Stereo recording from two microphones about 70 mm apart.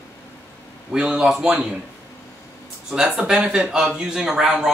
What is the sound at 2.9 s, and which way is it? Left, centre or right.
Speech, centre.